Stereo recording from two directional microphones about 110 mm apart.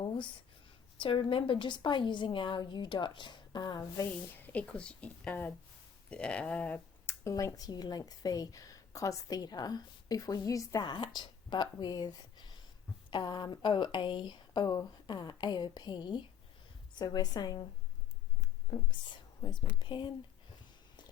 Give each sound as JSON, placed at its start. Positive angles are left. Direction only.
{"t": 0.9, "sound": "speech", "side_deg": 55}
{"t": 4.4, "sound": "a woman's voice", "side_deg": 15}
{"t": 18.7, "sound": "speech", "side_deg": 40}